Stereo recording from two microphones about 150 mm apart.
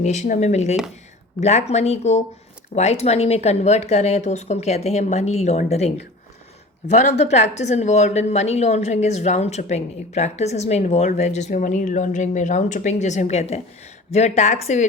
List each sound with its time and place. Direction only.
0.0 s speech: 50° left (ahead or behind)